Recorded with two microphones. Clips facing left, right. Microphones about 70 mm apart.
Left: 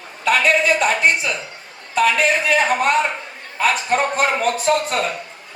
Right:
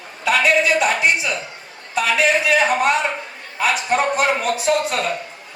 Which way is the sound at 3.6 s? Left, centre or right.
Left.